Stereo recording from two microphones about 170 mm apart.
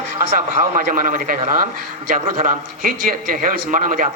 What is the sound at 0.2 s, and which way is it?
A man's voice, 55° right (ahead or behind).